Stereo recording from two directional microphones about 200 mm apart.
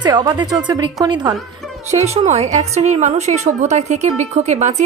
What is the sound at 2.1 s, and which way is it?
A woman's voice, 35° right (ahead or behind).